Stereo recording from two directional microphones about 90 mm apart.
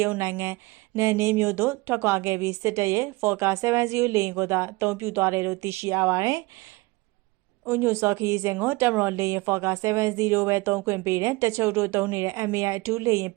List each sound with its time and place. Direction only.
0.2 s speech: 30° right (ahead or behind)
7.7 s speech: 25° right (ahead or behind)